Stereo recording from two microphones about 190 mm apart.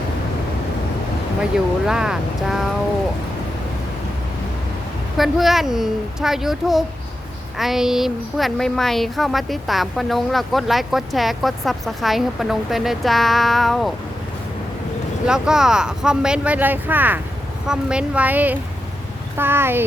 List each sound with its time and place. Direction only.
1.4 s speech: 5° right (ahead or behind)
5.1 s speech: centre (ahead or behind)
15.3 s speech: 5° right (ahead or behind)